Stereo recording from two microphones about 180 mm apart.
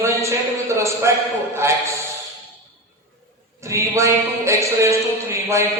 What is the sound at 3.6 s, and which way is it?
A man's voice, 15° right (ahead or behind).